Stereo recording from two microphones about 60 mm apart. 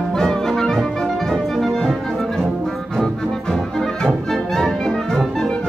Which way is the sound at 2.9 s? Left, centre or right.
Centre.